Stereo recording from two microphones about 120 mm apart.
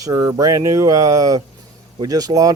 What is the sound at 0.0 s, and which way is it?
Speech, 30° right (ahead or behind).